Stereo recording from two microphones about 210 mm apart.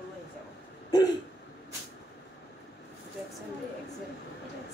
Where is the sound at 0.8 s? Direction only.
20° left (ahead or behind).